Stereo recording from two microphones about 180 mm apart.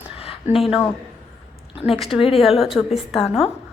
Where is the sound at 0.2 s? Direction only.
35° left (ahead or behind).